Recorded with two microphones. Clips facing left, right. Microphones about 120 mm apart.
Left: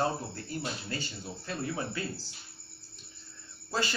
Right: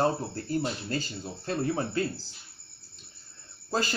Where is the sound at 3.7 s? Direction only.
40° right (ahead or behind).